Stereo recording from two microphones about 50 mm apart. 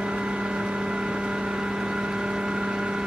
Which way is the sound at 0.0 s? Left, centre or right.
Centre.